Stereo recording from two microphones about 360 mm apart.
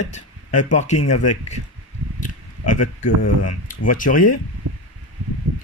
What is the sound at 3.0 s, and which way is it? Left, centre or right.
Speech, left.